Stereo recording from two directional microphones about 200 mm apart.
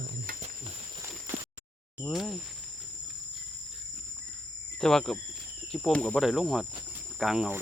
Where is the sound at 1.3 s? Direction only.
30° right (ahead or behind).